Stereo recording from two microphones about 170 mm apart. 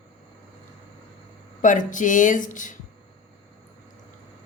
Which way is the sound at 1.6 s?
50° left (ahead or behind).